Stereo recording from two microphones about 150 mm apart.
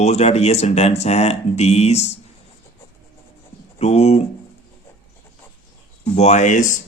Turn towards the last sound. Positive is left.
turn(degrees=60)  # may be behind; listen again after turning